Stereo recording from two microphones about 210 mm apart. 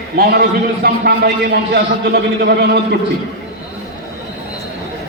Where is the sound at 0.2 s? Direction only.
45° right (ahead or behind).